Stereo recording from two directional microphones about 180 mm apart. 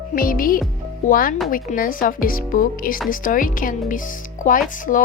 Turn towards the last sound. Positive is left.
turn(degrees=45)  # may be behind; listen again after turning